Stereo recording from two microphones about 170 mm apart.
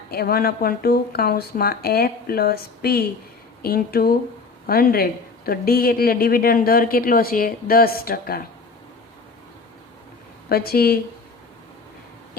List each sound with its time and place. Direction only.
0.1 s speech: 65° left (ahead or behind)
10.5 s speech: 65° left (ahead or behind)